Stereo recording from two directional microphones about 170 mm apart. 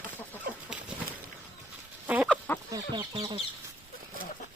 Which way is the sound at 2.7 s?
30° right (ahead or behind).